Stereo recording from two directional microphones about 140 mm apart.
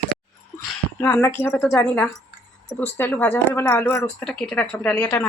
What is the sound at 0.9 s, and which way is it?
Speech, 20° left (ahead or behind).